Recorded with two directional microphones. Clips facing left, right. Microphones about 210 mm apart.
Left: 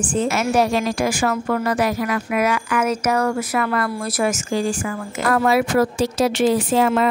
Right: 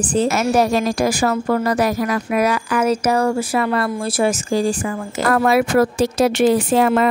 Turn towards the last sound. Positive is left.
turn(degrees=-50)  # may be behind; listen again after turning